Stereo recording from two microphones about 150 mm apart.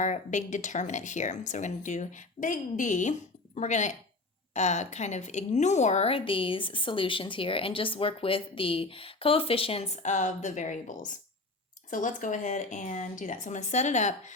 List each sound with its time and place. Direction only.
0.0 s speech: 55° left (ahead or behind)